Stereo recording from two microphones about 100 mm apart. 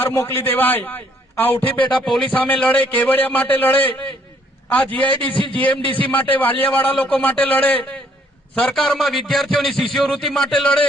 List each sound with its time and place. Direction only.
0.0 s a man's voice: 25° left (ahead or behind)
2.0 s a man's voice: 5° left (ahead or behind)
2.3 s a man's voice: 15° left (ahead or behind)
5.3 s a man's voice: 60° left (ahead or behind)
6.1 s a man's voice: 15° left (ahead or behind)
8.5 s a man's voice: 5° left (ahead or behind)